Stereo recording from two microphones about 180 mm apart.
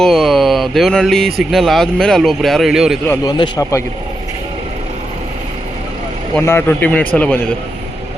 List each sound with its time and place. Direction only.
0.0 s speech: centre (ahead or behind)
3.2 s a man's voice: 25° left (ahead or behind)
6.4 s a man's voice: 15° left (ahead or behind)